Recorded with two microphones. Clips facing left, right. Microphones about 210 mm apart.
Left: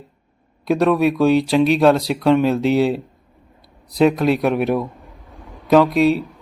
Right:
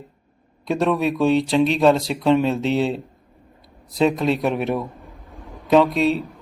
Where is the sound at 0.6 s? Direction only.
Centre (ahead or behind).